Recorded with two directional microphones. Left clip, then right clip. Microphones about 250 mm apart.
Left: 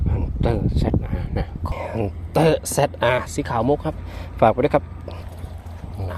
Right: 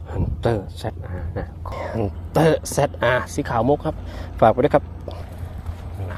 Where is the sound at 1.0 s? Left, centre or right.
Centre.